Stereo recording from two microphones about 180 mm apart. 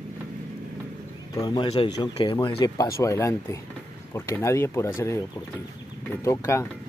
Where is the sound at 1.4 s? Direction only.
25° left (ahead or behind).